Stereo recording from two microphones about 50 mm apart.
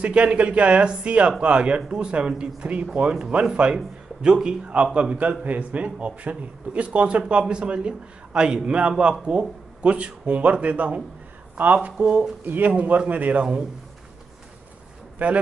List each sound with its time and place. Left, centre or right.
0.0 s speech: right
12.4 s speech: right
12.7 s speech: right